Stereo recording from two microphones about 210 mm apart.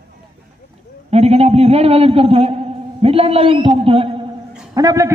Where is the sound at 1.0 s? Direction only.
30° right (ahead or behind).